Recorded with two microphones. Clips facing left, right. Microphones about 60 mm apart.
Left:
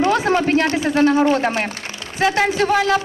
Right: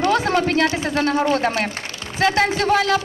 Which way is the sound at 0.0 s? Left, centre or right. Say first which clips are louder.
Left 2 dB; left.